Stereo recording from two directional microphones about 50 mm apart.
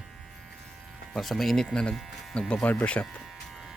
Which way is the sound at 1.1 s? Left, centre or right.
Centre.